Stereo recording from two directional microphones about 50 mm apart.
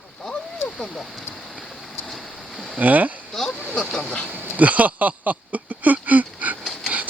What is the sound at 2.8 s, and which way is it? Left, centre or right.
Speech, right.